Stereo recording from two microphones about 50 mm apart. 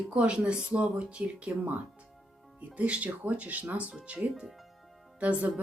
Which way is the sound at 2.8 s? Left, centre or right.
Right.